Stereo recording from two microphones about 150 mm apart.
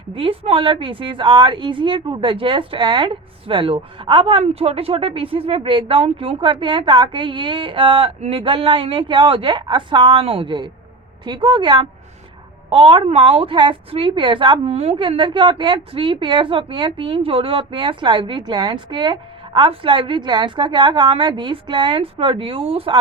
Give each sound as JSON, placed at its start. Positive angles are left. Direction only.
{"t": 0.1, "sound": "a woman's voice", "side_deg": -35}